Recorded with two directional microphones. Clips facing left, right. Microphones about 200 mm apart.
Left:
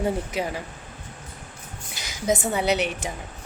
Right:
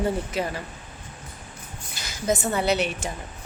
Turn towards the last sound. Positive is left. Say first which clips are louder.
# even
turn(degrees=15)  # may be behind; listen again after turning